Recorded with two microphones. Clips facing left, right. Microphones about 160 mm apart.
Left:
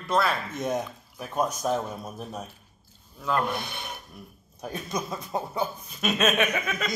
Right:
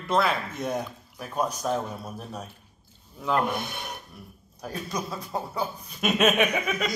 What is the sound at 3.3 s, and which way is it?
Speech, 15° right (ahead or behind).